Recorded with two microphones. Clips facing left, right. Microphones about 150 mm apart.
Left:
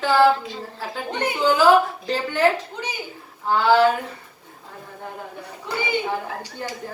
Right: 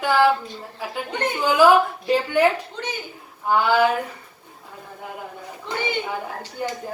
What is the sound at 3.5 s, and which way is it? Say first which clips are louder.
Speech: left 2 dB; 15° right (ahead or behind).